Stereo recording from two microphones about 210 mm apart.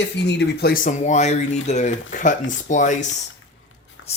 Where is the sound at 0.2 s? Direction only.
55° left (ahead or behind).